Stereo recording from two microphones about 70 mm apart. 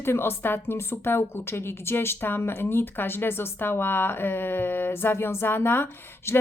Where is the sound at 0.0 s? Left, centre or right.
Left.